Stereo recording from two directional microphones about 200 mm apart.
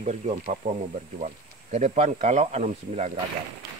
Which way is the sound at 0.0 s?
35° right (ahead or behind).